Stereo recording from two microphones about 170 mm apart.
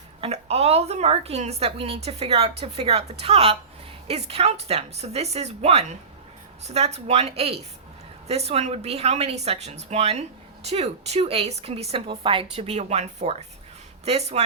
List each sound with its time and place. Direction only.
0.2 s a woman's voice: 35° right (ahead or behind)